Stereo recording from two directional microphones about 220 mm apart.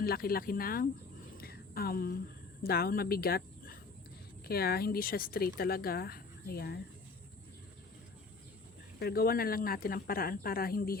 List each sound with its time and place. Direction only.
0.0 s speech: 45° left (ahead or behind)
1.4 s a sound: 45° left (ahead or behind)
2.6 s speech: 45° left (ahead or behind)
9.0 s speech: 45° left (ahead or behind)